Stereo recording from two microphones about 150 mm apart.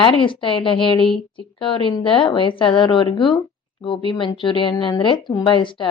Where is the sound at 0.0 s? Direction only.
35° left (ahead or behind).